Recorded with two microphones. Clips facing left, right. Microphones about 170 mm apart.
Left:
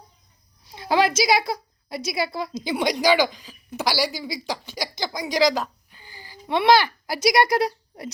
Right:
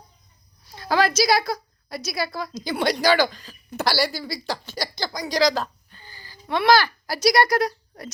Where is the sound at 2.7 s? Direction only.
15° left (ahead or behind).